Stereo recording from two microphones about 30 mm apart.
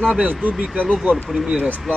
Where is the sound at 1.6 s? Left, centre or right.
Right.